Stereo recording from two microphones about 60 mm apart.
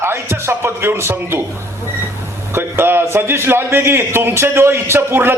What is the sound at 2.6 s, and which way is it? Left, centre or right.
A man's voice, right.